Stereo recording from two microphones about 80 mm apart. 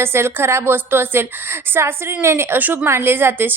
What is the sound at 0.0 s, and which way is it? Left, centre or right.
A woman's voice, right.